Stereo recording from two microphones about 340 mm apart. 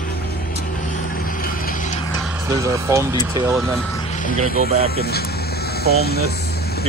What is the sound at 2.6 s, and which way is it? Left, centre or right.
Speech, centre.